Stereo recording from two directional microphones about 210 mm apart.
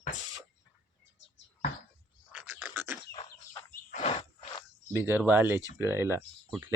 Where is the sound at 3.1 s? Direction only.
20° left (ahead or behind).